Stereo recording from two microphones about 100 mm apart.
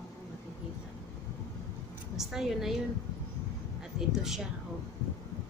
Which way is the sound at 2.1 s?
5° right (ahead or behind).